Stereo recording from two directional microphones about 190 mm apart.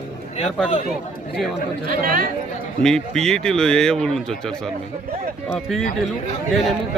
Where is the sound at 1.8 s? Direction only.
50° right (ahead or behind).